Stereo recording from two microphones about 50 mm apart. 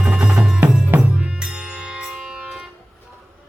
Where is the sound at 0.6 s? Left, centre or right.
Right.